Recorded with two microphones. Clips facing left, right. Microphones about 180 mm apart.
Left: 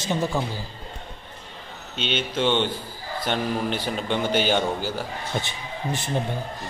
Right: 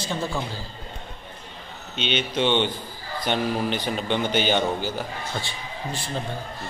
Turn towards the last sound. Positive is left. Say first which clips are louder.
# left 3 dB
turn(degrees=20)  # may be behind; listen again after turning